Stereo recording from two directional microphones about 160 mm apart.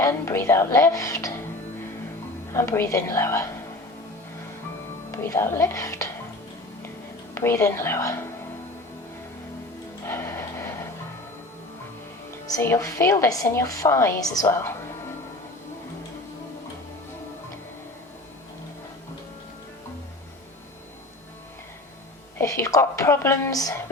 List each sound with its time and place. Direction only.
0.0 s speech: 20° left (ahead or behind)
2.5 s speech: 15° left (ahead or behind)
5.1 s speech: 15° left (ahead or behind)
7.3 s speech: 15° left (ahead or behind)
10.1 s music: 15° left (ahead or behind)
12.5 s a woman's voice: 20° left (ahead or behind)
22.4 s a woman's voice: 20° left (ahead or behind)